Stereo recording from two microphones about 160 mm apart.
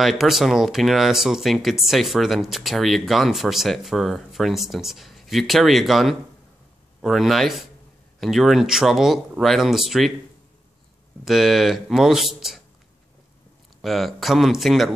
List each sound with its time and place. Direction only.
0.0 s speech: centre (ahead or behind)
11.2 s speech: centre (ahead or behind)
13.7 s speech: centre (ahead or behind)